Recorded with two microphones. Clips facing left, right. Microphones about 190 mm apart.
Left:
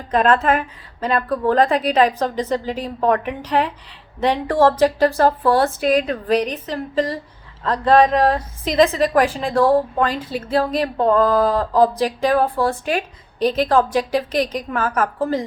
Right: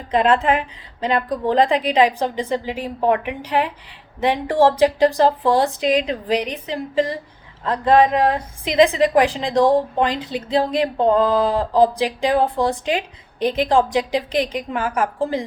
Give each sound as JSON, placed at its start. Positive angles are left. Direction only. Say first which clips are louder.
{"t": 0.1, "sound": "a woman's voice", "louder": "even", "side_deg": -15}